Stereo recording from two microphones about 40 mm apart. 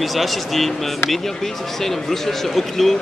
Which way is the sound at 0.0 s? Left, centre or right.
Centre.